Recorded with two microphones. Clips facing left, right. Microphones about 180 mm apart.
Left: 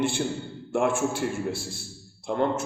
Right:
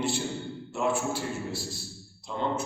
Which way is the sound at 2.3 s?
65° left (ahead or behind).